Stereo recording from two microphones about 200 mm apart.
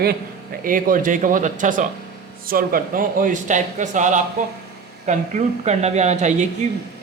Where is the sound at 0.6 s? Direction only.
45° right (ahead or behind).